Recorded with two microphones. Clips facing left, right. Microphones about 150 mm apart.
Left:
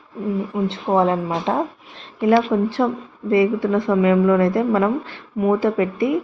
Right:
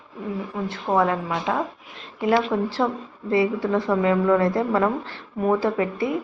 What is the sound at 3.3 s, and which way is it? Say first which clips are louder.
A woman's voice: left 4 dB; 15° left (ahead or behind).